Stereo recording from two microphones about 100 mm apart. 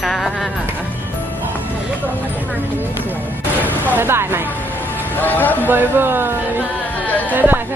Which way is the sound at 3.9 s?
20° right (ahead or behind).